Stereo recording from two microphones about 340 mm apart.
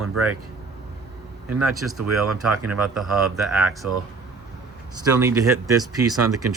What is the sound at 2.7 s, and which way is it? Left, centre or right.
Speech, centre.